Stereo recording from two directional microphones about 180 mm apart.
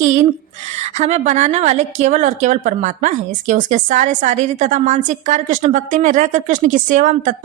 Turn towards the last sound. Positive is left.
turn(degrees=-45)  # may be behind; listen again after turning